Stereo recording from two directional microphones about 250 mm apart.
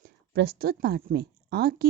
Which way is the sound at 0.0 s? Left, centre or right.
Right.